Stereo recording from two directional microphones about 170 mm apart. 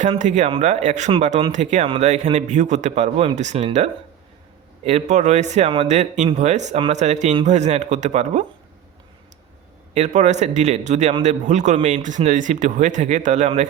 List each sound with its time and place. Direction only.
0.2 s speech: 45° right (ahead or behind)
9.9 s speech: 45° right (ahead or behind)